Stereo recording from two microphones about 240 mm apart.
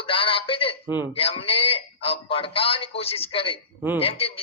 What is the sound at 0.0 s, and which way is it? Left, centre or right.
Speech, left.